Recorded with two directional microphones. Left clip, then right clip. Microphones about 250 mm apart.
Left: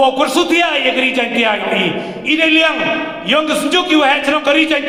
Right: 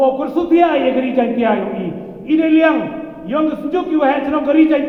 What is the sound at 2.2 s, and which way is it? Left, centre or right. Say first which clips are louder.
Speech: left 1 dB; left.